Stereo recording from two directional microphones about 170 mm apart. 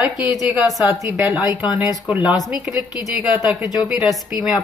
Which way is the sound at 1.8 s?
10° right (ahead or behind).